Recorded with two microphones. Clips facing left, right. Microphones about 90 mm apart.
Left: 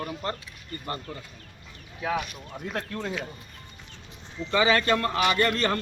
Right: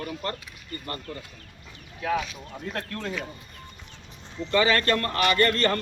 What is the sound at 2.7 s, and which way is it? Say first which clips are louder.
Speech: left 1 dB; 15° left (ahead or behind).